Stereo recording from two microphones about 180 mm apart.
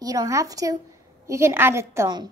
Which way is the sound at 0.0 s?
20° right (ahead or behind).